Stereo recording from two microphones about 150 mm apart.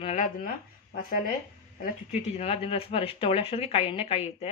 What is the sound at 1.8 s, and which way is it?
Speech, 45° left (ahead or behind).